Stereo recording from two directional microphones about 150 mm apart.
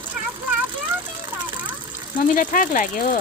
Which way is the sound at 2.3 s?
60° left (ahead or behind).